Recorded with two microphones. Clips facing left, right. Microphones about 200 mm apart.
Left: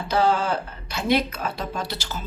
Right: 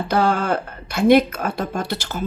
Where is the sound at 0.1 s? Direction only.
55° right (ahead or behind).